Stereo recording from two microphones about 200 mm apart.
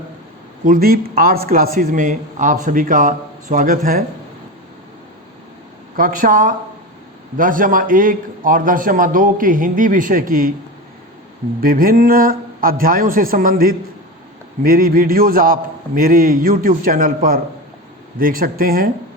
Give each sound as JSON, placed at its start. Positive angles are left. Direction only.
{"t": 0.6, "sound": "speech", "side_deg": -45}
{"t": 6.0, "sound": "speech", "side_deg": -45}
{"t": 11.6, "sound": "speech", "side_deg": -45}